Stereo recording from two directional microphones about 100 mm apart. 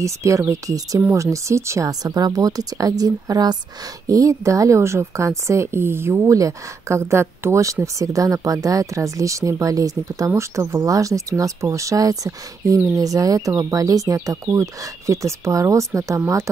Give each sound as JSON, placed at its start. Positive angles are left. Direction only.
{"t": 0.0, "sound": "a woman's voice", "side_deg": -30}